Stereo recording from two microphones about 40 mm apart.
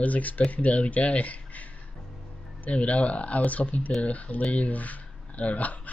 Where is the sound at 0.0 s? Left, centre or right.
Left.